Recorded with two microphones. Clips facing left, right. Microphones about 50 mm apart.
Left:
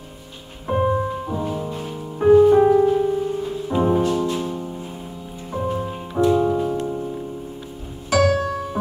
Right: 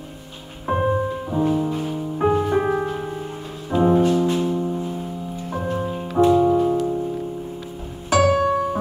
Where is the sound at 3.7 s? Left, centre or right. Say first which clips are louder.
Right 2 dB; centre.